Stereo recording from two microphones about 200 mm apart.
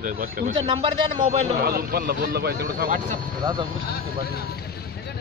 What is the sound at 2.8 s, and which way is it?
Speech, 40° right (ahead or behind).